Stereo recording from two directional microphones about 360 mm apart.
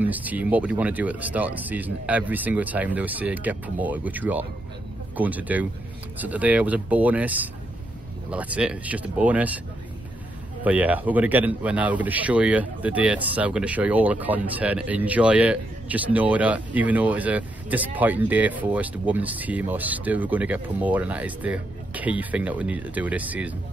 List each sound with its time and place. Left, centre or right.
0.0 s a man's voice: centre
10.6 s a man's voice: centre